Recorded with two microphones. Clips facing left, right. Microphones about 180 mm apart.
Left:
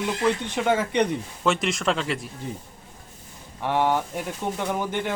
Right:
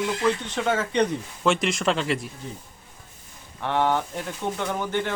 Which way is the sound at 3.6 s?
10° left (ahead or behind).